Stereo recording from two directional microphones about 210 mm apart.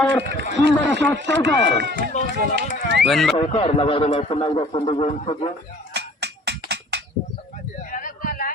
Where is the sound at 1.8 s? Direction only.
50° right (ahead or behind).